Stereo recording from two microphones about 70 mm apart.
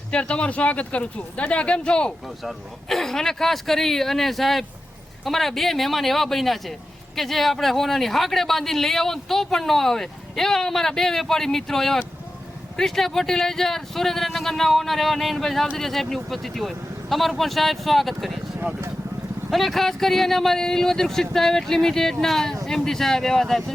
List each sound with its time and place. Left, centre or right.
0.1 s speech: centre
2.4 s speech: centre
19.5 s speech: centre